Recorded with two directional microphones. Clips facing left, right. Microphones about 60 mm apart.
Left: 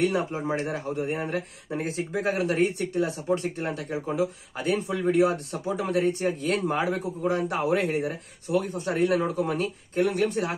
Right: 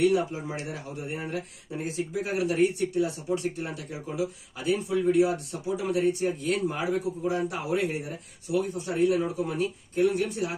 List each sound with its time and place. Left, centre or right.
0.0 s speech: left
3.3 s speech: left
3.5 s speech: left